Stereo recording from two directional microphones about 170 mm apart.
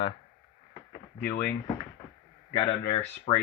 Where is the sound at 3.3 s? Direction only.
35° left (ahead or behind).